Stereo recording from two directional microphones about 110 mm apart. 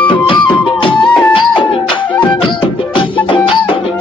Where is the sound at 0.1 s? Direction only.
50° left (ahead or behind).